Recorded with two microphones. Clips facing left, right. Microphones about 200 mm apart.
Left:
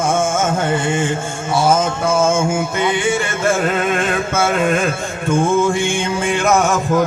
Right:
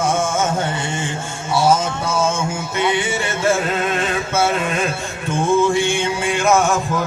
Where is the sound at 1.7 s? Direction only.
50° left (ahead or behind).